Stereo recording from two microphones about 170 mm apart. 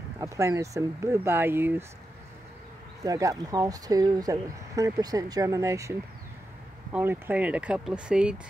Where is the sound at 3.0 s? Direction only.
20° right (ahead or behind).